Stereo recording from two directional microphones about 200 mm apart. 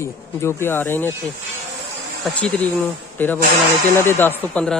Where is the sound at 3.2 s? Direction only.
10° left (ahead or behind).